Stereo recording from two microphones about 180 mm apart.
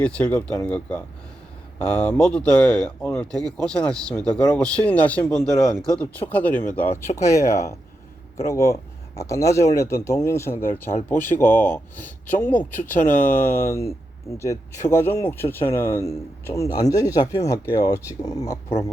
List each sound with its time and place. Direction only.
0.0 s speech: 10° left (ahead or behind)